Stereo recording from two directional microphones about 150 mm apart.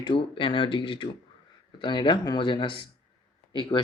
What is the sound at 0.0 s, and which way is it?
Speech, 35° left (ahead or behind).